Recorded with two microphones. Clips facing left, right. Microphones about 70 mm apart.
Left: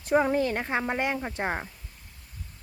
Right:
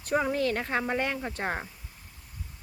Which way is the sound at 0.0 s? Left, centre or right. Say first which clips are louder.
Left 3 dB; left.